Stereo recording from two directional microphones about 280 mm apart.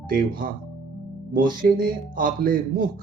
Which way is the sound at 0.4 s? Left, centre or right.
Right.